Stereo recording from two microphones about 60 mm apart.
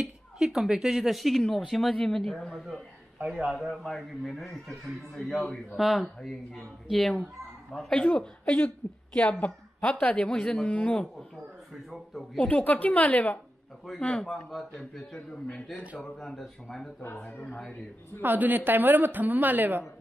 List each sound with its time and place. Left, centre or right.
0.4 s a man's voice: centre
7.9 s a woman's voice: centre
11.9 s a man's voice: centre
12.4 s a woman's voice: left
14.0 s a woman's voice: centre
15.1 s a woman's voice: left
16.0 s a woman's voice: centre
17.3 s a woman's voice: left
18.2 s speech: right